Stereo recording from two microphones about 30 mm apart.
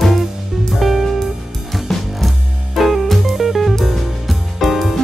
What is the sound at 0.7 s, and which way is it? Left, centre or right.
Music, centre.